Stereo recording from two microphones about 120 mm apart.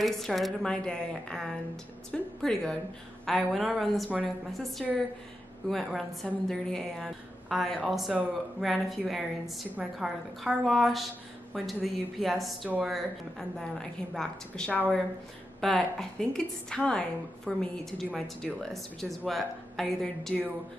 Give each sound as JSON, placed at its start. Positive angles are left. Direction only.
{"t": 0.0, "sound": "speech", "side_deg": 0}
{"t": 12.6, "sound": "speech", "side_deg": -10}
{"t": 12.9, "sound": "speech", "side_deg": 5}